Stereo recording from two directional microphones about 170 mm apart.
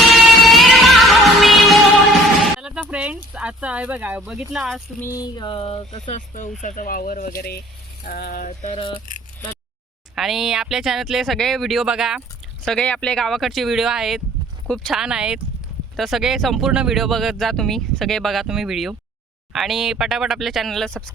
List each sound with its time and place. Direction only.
0.1 s music: centre (ahead or behind)
2.4 s a sound: 5° right (ahead or behind)
3.3 s speech: 5° right (ahead or behind)
4.9 s a sound: 15° left (ahead or behind)
5.2 s speech: 25° left (ahead or behind)
6.1 s music: 45° left (ahead or behind)
6.6 s speech: 50° left (ahead or behind)
8.0 s music: 60° left (ahead or behind)
10.2 s speech: centre (ahead or behind)